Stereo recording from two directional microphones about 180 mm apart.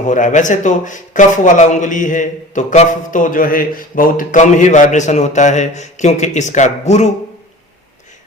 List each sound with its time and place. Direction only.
0.0 s a man's voice: 45° left (ahead or behind)